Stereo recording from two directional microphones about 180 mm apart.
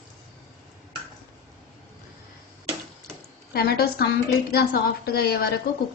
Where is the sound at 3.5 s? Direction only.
60° left (ahead or behind).